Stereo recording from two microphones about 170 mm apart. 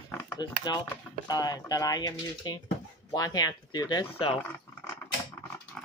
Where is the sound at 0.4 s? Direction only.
25° left (ahead or behind).